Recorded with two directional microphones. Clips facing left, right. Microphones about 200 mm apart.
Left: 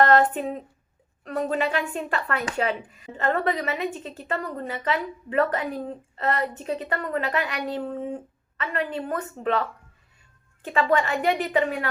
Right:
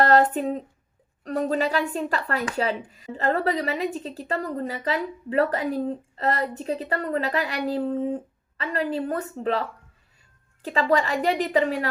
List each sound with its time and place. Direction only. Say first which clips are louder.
0.0 s speech: even; 35° right (ahead or behind)